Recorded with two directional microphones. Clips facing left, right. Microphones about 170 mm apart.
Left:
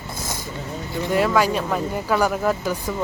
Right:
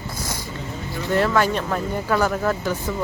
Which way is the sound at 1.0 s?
10° left (ahead or behind).